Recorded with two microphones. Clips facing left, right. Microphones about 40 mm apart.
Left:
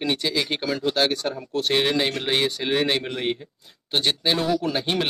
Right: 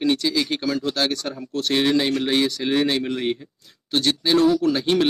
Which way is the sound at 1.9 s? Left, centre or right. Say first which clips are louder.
Right 3 dB; left.